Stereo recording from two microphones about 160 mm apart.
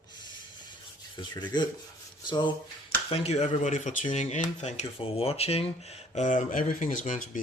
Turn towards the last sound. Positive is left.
turn(degrees=55)  # may be behind; listen again after turning